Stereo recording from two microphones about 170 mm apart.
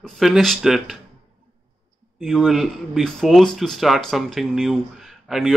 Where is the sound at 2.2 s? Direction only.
Centre (ahead or behind).